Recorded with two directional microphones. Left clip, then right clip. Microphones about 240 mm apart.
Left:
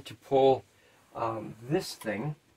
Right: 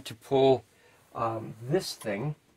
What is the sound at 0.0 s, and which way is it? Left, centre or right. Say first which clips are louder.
Speech: even; right.